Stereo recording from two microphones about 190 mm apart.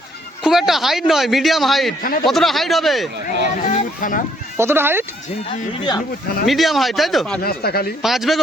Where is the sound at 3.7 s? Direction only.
40° left (ahead or behind).